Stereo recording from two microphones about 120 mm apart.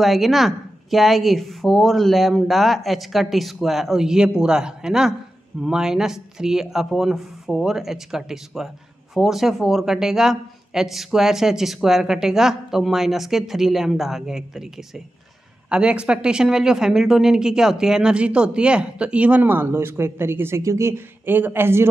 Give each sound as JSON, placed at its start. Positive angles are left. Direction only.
{"t": 0.0, "sound": "speech", "side_deg": 0}
{"t": 15.7, "sound": "speech", "side_deg": -10}